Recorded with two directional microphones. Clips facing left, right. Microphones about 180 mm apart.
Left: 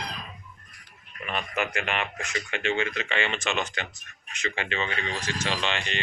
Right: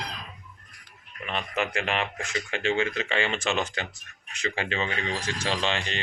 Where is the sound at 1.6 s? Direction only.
30° right (ahead or behind).